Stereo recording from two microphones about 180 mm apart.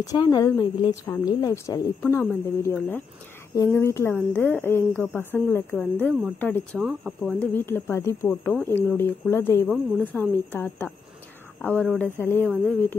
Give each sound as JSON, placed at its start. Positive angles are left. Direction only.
{"t": 0.0, "sound": "a woman's voice", "side_deg": 20}
{"t": 6.9, "sound": "speech", "side_deg": -5}
{"t": 7.3, "sound": "a woman's voice", "side_deg": 10}
{"t": 12.2, "sound": "a woman's voice", "side_deg": 10}